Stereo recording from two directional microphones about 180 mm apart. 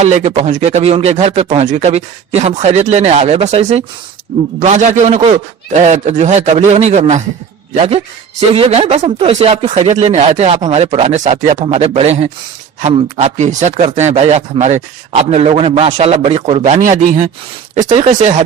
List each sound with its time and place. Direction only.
0.0 s speech: 40° right (ahead or behind)